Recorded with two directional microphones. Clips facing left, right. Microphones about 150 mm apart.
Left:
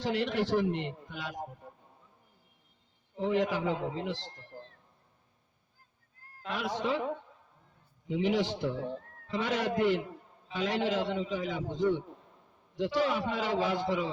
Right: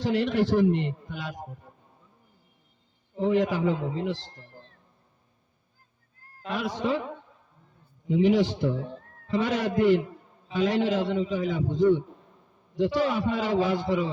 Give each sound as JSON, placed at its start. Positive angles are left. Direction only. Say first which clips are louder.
{"t": 0.0, "sound": "a man's voice", "louder": "right 6 dB", "side_deg": -40}
{"t": 3.2, "sound": "a man's voice", "louder": "right 5 dB", "side_deg": -45}
{"t": 6.5, "sound": "a man's voice", "louder": "right 4 dB", "side_deg": -40}
{"t": 8.0, "sound": "a man's voice", "louder": "right 7 dB", "side_deg": -45}